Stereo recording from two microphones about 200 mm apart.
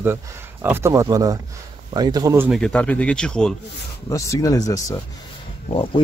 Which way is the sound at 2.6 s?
5° left (ahead or behind).